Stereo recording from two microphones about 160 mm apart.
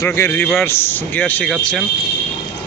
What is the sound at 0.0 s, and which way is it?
A man's voice, 15° left (ahead or behind).